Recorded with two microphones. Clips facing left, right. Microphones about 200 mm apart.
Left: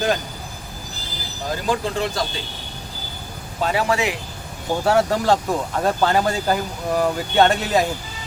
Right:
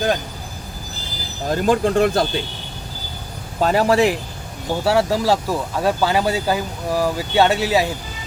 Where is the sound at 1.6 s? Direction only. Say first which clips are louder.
Right 7 dB; 55° right (ahead or behind).